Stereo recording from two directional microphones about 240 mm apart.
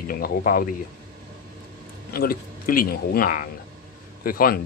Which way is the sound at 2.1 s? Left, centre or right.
Left.